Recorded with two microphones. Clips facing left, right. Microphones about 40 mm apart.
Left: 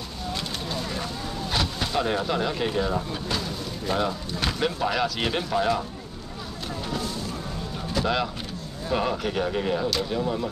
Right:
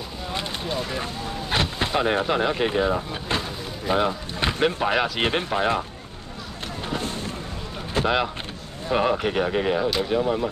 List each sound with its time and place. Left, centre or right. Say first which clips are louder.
0.3 s vehicle: right 3 dB; right
1.5 s speech: right 3 dB; right
7.0 s a sound: right 1 dB; right
7.9 s speech: right 3 dB; right